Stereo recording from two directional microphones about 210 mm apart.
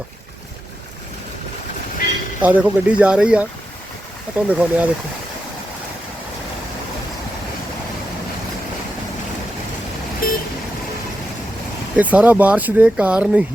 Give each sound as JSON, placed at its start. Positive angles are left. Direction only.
{"t": 2.4, "sound": "speech", "side_deg": -5}
{"t": 10.2, "sound": "vehicle", "side_deg": 40}
{"t": 11.9, "sound": "speech", "side_deg": -5}